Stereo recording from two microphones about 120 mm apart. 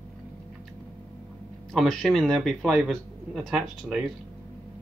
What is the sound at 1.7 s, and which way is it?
Speech, 5° left (ahead or behind).